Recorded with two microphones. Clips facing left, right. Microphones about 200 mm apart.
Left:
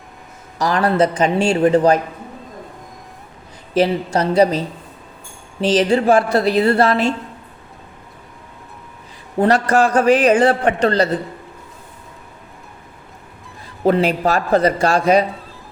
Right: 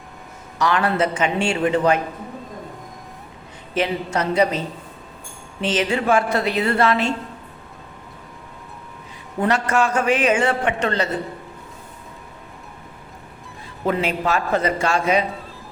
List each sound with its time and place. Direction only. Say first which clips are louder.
0.6 s a man's voice: left 4 dB; 40° left (ahead or behind)
3.8 s a man's voice: left 5 dB; 35° left (ahead or behind)
9.4 s a man's voice: left 5 dB; 35° left (ahead or behind)
13.8 s a man's voice: left 6 dB; 35° left (ahead or behind)